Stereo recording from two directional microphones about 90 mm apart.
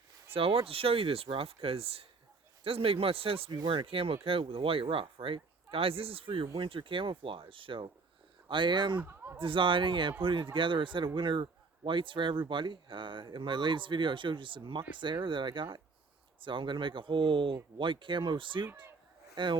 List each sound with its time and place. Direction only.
0.3 s speech: 90° right; by 7.9 s 75° right (ahead or behind)
8.4 s speech: 65° right (ahead or behind)
9.0 s a sound: 30° right (ahead or behind)
9.4 s speech: 70° right (ahead or behind)
18.6 s speech: 30° right (ahead or behind)
19.4 s speech: 65° right (ahead or behind)